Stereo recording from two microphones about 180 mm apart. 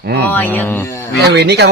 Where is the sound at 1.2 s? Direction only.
65° right (ahead or behind).